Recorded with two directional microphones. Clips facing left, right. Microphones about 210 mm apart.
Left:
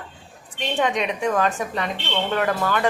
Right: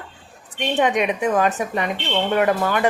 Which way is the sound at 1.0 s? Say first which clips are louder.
Right 3 dB; 20° right (ahead or behind).